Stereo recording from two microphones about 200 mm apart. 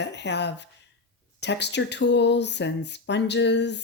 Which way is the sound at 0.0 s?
60° left (ahead or behind).